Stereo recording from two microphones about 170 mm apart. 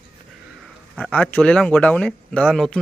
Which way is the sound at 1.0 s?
10° left (ahead or behind).